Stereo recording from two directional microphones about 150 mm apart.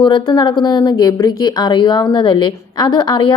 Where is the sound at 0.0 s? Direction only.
30° left (ahead or behind).